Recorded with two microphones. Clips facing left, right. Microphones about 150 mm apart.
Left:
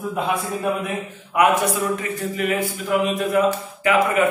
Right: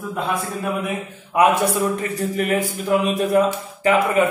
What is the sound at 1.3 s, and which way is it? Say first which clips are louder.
A man's voice: right 1 dB; 30° right (ahead or behind).